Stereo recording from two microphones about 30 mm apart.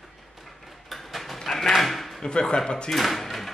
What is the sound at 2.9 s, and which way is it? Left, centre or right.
Speech, centre.